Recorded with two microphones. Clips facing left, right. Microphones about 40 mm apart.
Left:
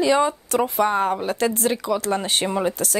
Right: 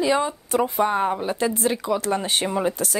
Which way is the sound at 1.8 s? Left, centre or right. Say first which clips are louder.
Even; left.